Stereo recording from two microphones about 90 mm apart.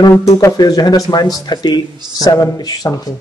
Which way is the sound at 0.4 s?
45° left (ahead or behind).